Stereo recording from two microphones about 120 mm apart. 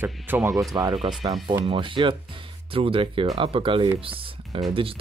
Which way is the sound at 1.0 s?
40° right (ahead or behind).